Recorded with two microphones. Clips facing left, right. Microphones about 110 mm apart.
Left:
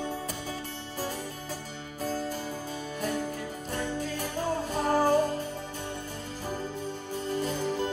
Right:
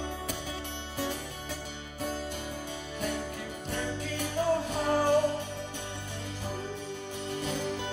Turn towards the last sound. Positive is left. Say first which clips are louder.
# left 3 dB
turn(degrees=40)  # may be behind; listen again after turning